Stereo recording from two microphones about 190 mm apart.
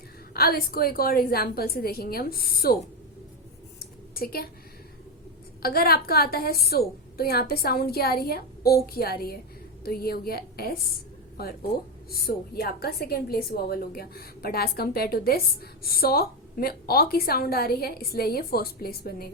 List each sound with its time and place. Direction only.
0.3 s a woman's voice: 50° left (ahead or behind)
3.8 s a sound: 50° left (ahead or behind)
5.6 s a woman's voice: 55° left (ahead or behind)
12.2 s a woman's voice: 55° left (ahead or behind)